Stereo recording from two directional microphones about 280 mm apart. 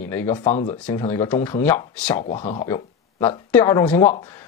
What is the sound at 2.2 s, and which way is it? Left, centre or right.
Speech, left.